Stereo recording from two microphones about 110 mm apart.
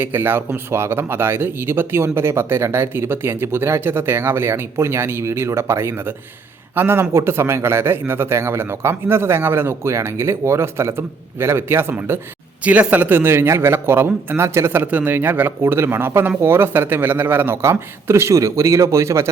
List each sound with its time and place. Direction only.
0.0 s speech: 20° right (ahead or behind)